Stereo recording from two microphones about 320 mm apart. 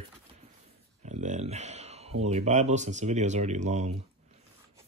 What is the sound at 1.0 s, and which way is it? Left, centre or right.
Speech, right.